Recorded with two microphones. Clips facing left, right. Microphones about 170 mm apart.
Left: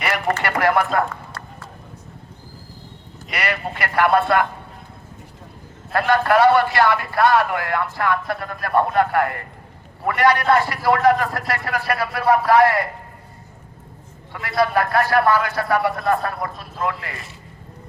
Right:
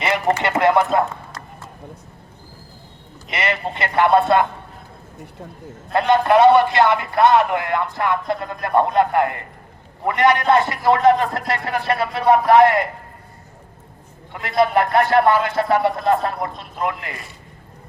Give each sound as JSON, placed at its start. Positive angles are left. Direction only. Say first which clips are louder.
{"t": 0.0, "sound": "run", "louder": "right 3 dB", "side_deg": -20}
{"t": 3.2, "sound": "a man's voice", "louder": "right 2 dB", "side_deg": -25}
{"t": 5.9, "sound": "a man's voice", "louder": "right 2 dB", "side_deg": -20}
{"t": 14.4, "sound": "a man's voice", "louder": "right 2 dB", "side_deg": -20}